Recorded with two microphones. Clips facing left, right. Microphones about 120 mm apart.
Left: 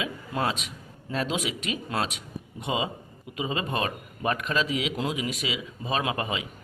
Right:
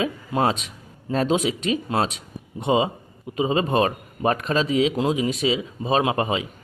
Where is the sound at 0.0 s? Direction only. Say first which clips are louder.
Right 7 dB; 35° right (ahead or behind).